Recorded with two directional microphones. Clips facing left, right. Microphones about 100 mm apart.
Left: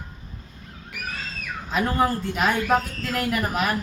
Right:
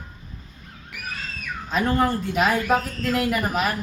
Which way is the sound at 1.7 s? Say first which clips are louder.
Right 1 dB; 5° left (ahead or behind).